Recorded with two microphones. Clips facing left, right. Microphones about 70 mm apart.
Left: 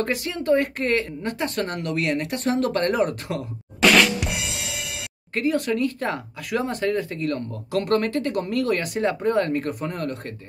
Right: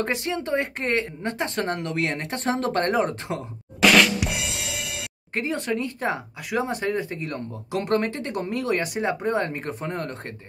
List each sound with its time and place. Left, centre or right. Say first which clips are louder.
0.0 s speech: left 1 dB; right
3.8 s drum kit: even; centre
5.3 s speech: left 4 dB; right